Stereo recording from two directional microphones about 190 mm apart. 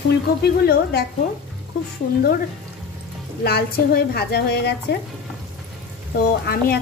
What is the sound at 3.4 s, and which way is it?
A woman's voice, 55° left (ahead or behind).